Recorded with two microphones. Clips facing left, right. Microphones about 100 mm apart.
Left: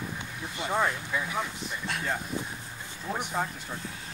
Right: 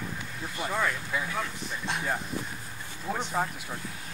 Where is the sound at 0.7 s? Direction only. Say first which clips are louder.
Left 2 dB; 20° left (ahead or behind).